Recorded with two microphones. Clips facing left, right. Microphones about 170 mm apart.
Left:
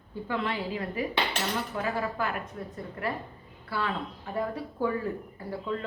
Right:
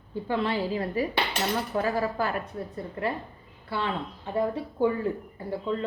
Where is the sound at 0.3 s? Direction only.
30° right (ahead or behind).